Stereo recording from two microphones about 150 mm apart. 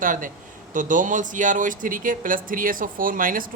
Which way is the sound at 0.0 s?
65° right (ahead or behind).